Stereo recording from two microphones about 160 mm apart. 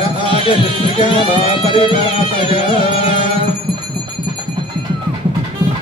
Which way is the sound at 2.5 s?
35° left (ahead or behind).